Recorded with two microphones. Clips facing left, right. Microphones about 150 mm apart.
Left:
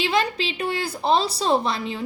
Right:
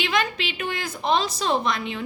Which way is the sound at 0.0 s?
30° left (ahead or behind).